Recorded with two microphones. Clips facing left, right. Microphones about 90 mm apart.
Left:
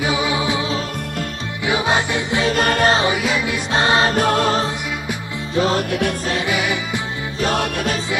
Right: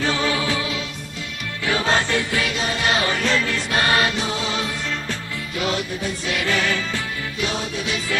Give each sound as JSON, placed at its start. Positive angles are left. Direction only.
{"t": 0.0, "sound": "music", "side_deg": 15}
{"t": 1.7, "sound": "music", "side_deg": 15}
{"t": 2.5, "sound": "music", "side_deg": 55}
{"t": 3.1, "sound": "music", "side_deg": 10}
{"t": 3.7, "sound": "music", "side_deg": 25}
{"t": 4.1, "sound": "music", "side_deg": 55}
{"t": 5.6, "sound": "music", "side_deg": 35}
{"t": 6.4, "sound": "music", "side_deg": 15}
{"t": 7.4, "sound": "music", "side_deg": 50}